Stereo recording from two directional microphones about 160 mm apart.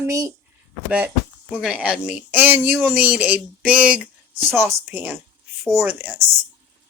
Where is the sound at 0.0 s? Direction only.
20° right (ahead or behind).